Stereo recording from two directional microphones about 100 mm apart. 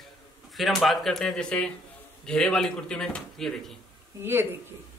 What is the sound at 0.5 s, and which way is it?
Speech, centre (ahead or behind).